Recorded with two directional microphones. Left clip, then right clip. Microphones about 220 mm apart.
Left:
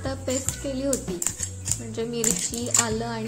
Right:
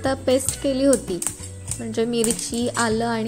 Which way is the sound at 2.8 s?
40° right (ahead or behind).